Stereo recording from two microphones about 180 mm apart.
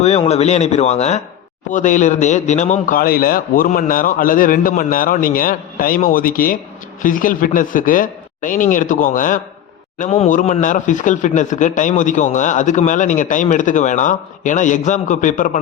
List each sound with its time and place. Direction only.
0.0 s a man's voice: 35° left (ahead or behind)